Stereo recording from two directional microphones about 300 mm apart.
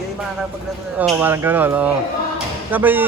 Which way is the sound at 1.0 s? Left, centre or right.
Centre.